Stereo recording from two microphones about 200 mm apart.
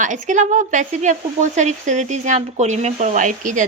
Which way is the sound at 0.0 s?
40° right (ahead or behind).